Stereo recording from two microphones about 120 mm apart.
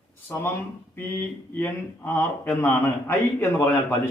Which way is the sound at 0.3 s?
20° left (ahead or behind).